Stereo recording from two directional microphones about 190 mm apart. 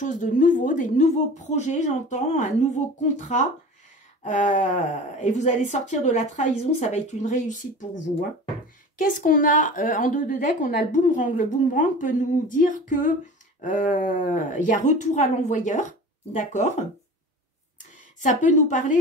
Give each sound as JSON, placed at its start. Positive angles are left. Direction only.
{"t": 0.0, "sound": "a woman's voice", "side_deg": 40}
{"t": 8.9, "sound": "a woman's voice", "side_deg": 45}
{"t": 18.2, "sound": "a woman's voice", "side_deg": 40}